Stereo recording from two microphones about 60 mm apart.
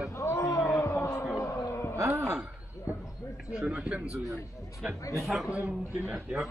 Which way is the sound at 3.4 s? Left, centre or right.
Centre.